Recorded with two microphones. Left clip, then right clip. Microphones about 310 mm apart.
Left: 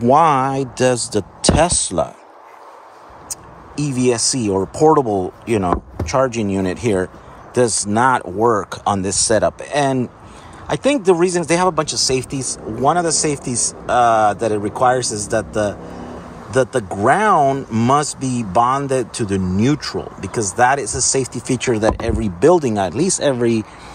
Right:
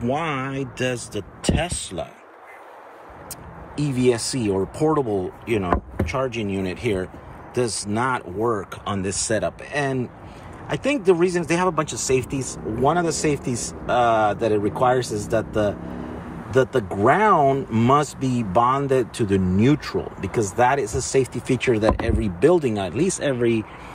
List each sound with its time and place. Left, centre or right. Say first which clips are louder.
0.0 s speech: left 12 dB; centre
3.3 s speech: left 4 dB; centre
20.8 s speech: left 4 dB; centre
21.1 s speech: right 1 dB; centre